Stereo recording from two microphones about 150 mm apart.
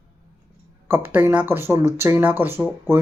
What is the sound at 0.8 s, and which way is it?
Speech, 15° right (ahead or behind).